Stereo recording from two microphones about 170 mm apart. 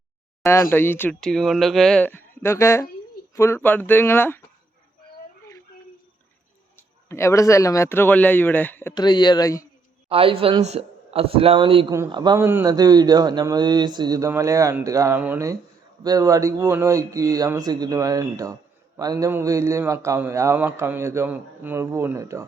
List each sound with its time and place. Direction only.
0.4 s speech: 15° left (ahead or behind)
6.7 s speech: 15° left (ahead or behind)
9.0 s speech: 25° left (ahead or behind)
10.1 s speech: 35° right (ahead or behind); by 22.4 s 20° right (ahead or behind)